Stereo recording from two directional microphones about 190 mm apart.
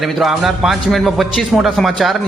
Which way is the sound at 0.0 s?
Centre (ahead or behind).